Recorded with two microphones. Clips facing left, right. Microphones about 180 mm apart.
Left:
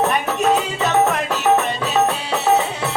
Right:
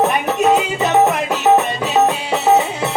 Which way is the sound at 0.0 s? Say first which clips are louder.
Right 3 dB; 15° right (ahead or behind).